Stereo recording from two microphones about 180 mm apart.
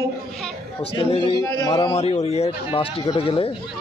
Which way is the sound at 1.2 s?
25° left (ahead or behind).